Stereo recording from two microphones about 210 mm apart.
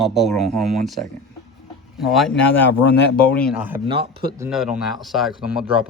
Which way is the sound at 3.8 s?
25° right (ahead or behind).